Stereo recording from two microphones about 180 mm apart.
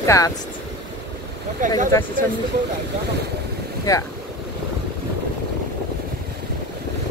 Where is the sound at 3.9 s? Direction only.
20° left (ahead or behind).